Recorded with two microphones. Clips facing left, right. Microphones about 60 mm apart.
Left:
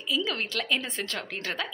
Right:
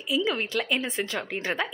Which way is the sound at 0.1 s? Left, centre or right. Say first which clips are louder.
Right 3 dB; centre.